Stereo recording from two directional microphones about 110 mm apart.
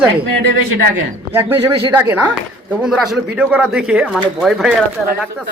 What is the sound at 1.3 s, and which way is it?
A man's voice, 20° right (ahead or behind).